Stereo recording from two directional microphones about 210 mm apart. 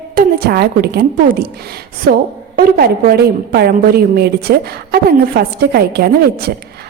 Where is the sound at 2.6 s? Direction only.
45° right (ahead or behind).